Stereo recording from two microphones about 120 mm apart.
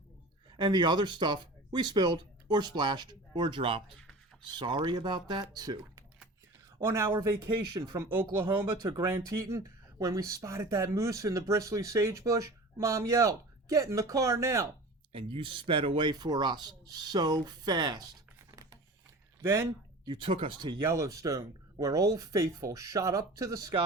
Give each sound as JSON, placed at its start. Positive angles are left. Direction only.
{"t": 0.5, "sound": "speech", "side_deg": -40}
{"t": 6.8, "sound": "speech", "side_deg": -20}
{"t": 8.4, "sound": "speech", "side_deg": -40}
{"t": 9.0, "sound": "speech", "side_deg": -20}
{"t": 15.1, "sound": "speech", "side_deg": -45}
{"t": 19.4, "sound": "speech", "side_deg": -25}
{"t": 20.1, "sound": "speech", "side_deg": -45}
{"t": 20.8, "sound": "speech", "side_deg": -25}